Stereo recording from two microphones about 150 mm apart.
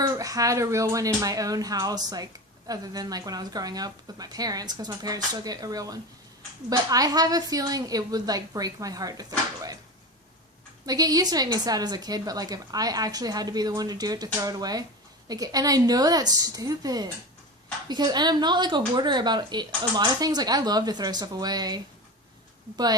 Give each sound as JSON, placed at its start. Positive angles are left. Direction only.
{"t": 0.0, "sound": "a woman's voice", "side_deg": -25}
{"t": 10.8, "sound": "a woman's voice", "side_deg": -25}